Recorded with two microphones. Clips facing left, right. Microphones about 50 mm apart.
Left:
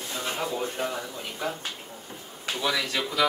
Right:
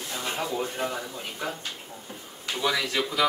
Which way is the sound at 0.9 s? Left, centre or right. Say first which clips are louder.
Even; centre.